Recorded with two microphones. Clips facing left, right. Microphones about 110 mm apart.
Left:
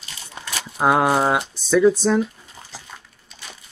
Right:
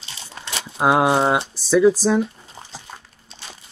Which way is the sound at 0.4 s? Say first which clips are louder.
Left 1 dB; 20° left (ahead or behind).